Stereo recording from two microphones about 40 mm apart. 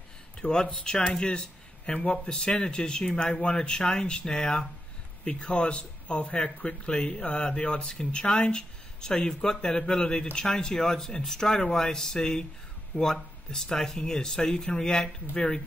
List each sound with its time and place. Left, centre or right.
0.4 s speech: left
1.9 s speech: left